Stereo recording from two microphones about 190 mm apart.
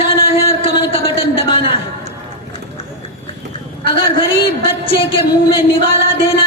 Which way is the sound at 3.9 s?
25° left (ahead or behind).